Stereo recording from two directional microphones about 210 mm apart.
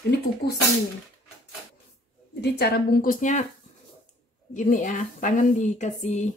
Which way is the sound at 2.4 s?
50° left (ahead or behind).